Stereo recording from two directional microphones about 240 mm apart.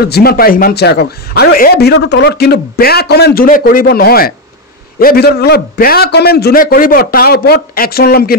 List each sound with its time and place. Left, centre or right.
0.0 s a man's voice: left